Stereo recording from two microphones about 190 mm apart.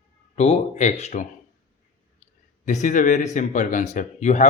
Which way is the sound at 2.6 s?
40° left (ahead or behind).